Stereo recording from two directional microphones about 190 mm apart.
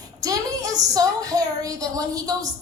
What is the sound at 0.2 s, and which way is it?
A woman's voice, 20° right (ahead or behind).